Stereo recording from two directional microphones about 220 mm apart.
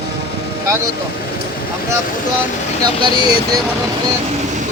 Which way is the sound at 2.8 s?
20° right (ahead or behind).